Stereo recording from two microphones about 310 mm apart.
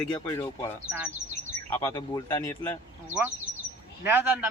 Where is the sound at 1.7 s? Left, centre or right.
Centre.